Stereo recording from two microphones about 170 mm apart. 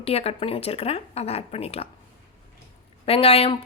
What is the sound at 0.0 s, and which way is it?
Speech, 35° left (ahead or behind).